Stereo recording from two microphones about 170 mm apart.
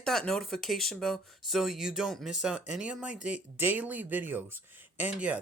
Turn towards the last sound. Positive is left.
turn(degrees=-5)  # may be behind; listen again after turning